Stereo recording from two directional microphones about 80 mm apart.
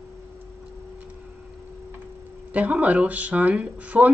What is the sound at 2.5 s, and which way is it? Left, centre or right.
Speech, centre.